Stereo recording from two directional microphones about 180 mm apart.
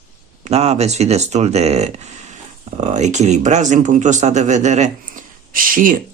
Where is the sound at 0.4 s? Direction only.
35° right (ahead or behind).